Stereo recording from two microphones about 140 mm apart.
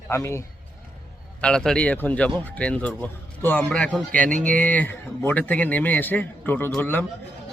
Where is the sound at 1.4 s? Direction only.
5° left (ahead or behind).